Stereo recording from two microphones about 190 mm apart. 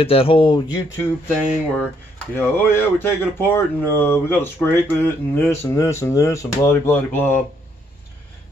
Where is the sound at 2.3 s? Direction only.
10° left (ahead or behind).